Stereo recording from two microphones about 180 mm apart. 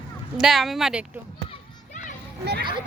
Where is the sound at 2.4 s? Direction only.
65° right (ahead or behind).